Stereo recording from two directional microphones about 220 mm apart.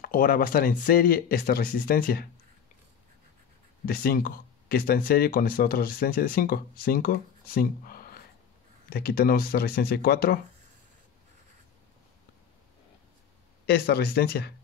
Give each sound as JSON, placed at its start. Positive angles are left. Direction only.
{"t": 0.0, "sound": "speech", "side_deg": 40}
{"t": 3.8, "sound": "speech", "side_deg": 40}
{"t": 13.7, "sound": "speech", "side_deg": 45}